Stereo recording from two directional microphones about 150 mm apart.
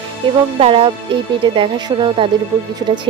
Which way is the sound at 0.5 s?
40° right (ahead or behind).